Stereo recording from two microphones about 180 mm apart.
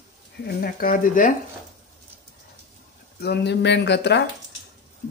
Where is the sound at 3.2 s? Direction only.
65° left (ahead or behind).